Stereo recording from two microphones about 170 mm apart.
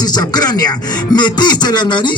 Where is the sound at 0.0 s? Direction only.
25° left (ahead or behind).